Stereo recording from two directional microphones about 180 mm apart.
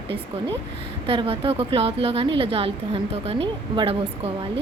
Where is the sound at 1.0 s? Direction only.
30° right (ahead or behind).